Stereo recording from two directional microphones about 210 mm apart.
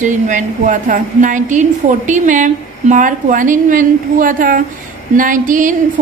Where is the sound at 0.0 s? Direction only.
35° right (ahead or behind).